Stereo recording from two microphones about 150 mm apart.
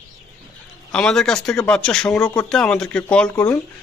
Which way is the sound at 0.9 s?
5° left (ahead or behind).